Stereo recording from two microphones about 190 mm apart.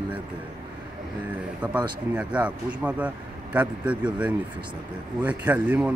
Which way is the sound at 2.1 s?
5° right (ahead or behind).